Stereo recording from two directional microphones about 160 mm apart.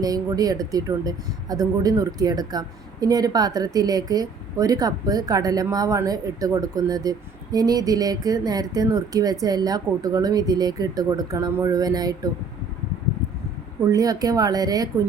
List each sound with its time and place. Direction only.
0.0 s speech: 25° right (ahead or behind)
13.8 s speech: 20° right (ahead or behind)